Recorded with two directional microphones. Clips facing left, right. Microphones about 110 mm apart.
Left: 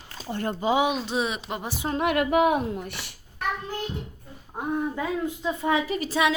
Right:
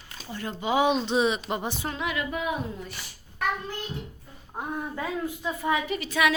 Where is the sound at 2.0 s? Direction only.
60° left (ahead or behind).